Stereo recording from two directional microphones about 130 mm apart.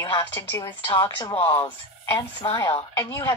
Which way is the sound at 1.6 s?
30° left (ahead or behind).